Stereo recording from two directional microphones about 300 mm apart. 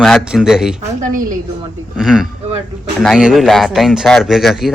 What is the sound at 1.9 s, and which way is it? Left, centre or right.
Speech, centre.